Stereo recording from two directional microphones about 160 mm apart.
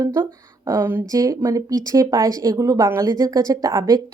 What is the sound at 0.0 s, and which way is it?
A woman's voice, 20° right (ahead or behind).